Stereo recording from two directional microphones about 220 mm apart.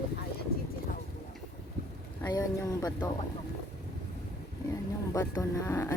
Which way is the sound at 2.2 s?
15° left (ahead or behind).